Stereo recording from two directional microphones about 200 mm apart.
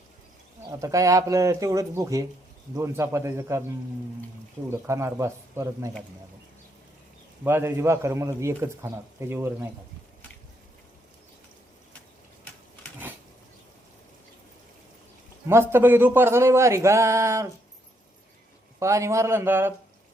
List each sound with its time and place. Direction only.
0.7 s speech: 15° right (ahead or behind)
4.7 s speech: 15° right (ahead or behind)
7.4 s speech: 10° right (ahead or behind)
15.4 s speech: 10° right (ahead or behind)
18.8 s speech: 15° right (ahead or behind)